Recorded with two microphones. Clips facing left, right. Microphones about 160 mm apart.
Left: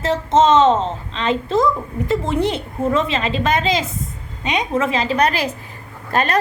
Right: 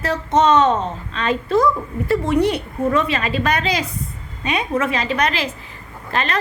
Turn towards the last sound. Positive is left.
turn(degrees=45)  # may be behind; listen again after turning